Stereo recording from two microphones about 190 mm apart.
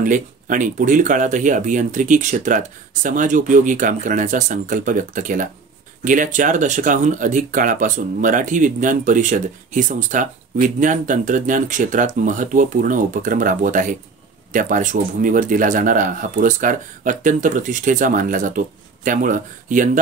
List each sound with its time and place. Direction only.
0.0 s speech: 45° right (ahead or behind)